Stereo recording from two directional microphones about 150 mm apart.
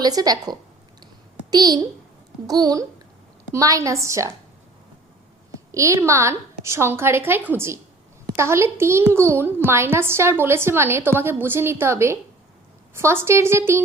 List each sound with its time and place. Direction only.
0.0 s a woman's voice: 25° right (ahead or behind)
5.7 s a woman's voice: 20° right (ahead or behind)